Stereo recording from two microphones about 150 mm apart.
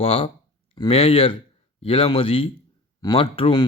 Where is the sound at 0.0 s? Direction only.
40° left (ahead or behind).